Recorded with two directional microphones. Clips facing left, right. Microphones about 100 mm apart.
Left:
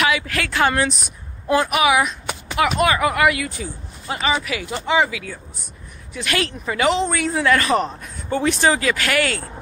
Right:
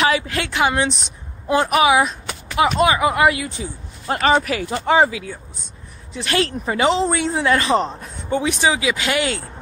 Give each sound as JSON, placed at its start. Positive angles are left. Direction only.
{"t": 0.0, "sound": "a woman's voice", "side_deg": -25}
{"t": 4.1, "sound": "speech", "side_deg": -50}
{"t": 8.3, "sound": "speech", "side_deg": -15}